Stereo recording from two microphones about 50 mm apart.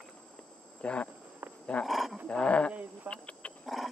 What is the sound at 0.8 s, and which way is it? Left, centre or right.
Speech, left.